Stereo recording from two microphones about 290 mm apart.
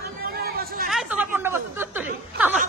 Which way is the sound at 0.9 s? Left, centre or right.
Centre.